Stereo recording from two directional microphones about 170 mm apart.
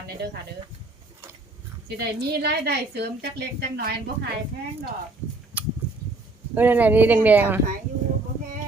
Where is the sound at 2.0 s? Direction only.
75° right (ahead or behind).